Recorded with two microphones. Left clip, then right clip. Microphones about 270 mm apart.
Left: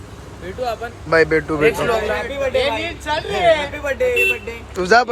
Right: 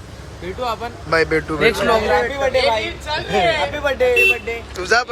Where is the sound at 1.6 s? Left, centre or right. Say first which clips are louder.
Right 4 dB; right.